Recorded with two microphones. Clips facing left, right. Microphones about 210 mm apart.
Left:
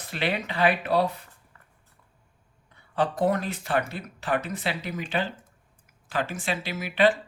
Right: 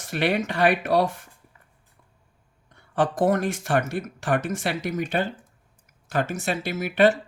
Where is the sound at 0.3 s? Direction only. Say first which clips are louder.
Right 1 dB; 45° right (ahead or behind).